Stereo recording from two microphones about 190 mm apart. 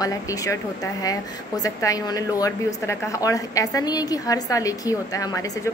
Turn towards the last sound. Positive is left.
turn(degrees=15)  # may be behind; listen again after turning